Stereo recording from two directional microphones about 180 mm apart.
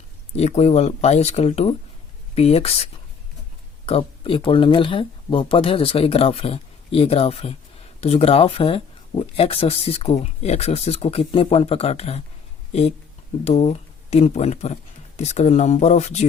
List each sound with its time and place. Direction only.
0.3 s speech: 35° left (ahead or behind)
13.4 s speech: 35° left (ahead or behind)